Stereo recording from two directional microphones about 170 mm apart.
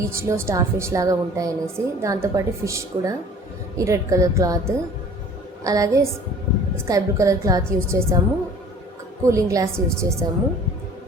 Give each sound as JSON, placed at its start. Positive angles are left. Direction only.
{"t": 0.0, "sound": "a woman's voice", "side_deg": -15}
{"t": 9.2, "sound": "a woman's voice", "side_deg": -20}